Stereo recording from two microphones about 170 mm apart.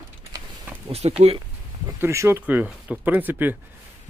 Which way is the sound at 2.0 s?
15° right (ahead or behind).